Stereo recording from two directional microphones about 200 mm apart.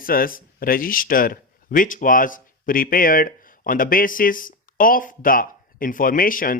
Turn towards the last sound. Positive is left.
turn(degrees=45)  # may be behind; listen again after turning